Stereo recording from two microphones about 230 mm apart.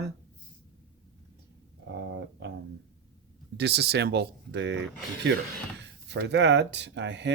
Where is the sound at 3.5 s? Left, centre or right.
Right.